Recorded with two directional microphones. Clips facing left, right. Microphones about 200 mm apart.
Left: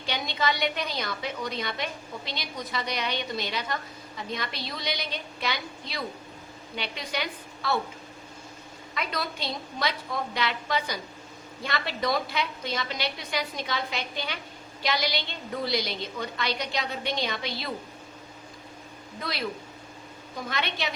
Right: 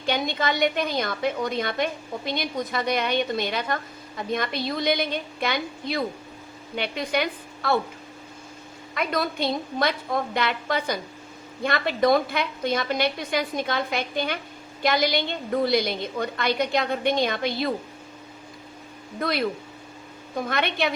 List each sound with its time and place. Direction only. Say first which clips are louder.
0.0 s a woman's voice: right 4 dB; 50° right (ahead or behind)
9.0 s a woman's voice: right 7 dB; 50° right (ahead or behind)
19.2 s a woman's voice: right 7 dB; 55° right (ahead or behind)